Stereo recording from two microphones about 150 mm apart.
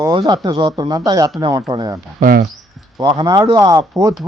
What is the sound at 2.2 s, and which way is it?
Speech, 70° right (ahead or behind).